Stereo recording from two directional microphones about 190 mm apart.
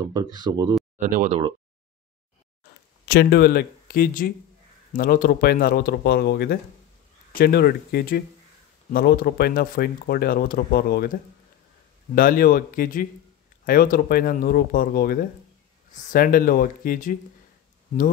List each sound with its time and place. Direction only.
0.1 s speech: 20° right (ahead or behind)
0.9 s speech: 40° right (ahead or behind)
3.1 s speech: 55° left (ahead or behind)
12.2 s speech: 50° left (ahead or behind)